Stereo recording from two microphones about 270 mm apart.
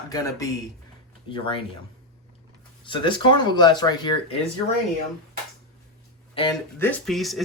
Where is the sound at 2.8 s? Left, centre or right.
Centre.